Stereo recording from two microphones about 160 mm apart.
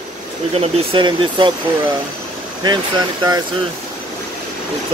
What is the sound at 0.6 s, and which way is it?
Speech, 30° right (ahead or behind).